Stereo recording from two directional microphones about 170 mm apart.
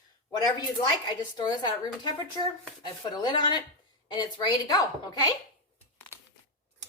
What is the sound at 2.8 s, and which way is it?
A woman's voice, 25° left (ahead or behind).